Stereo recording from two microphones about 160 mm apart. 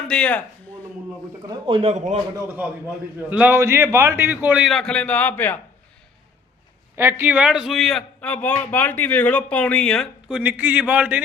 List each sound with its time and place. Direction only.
0.1 s speech: 5° left (ahead or behind)
1.5 s a man's voice: 30° right (ahead or behind)
2.3 s a man's voice: 15° right (ahead or behind); by 5.5 s 10° left (ahead or behind)
6.9 s a man's voice: 15° right (ahead or behind); by 10.3 s 5° left (ahead or behind)
10.3 s a man's voice: 10° right (ahead or behind)